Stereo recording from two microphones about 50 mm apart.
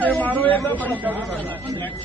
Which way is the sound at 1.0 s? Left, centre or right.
Right.